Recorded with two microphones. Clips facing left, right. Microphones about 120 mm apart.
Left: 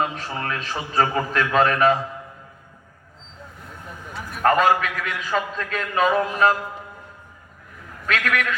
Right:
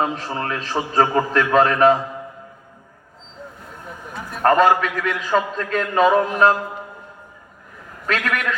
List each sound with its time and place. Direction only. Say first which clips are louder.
0.0 s a man's voice: right 3 dB; 30° right (ahead or behind)
4.4 s a man's voice: right 3 dB; 35° right (ahead or behind)
8.0 s a man's voice: right 1 dB; 35° right (ahead or behind)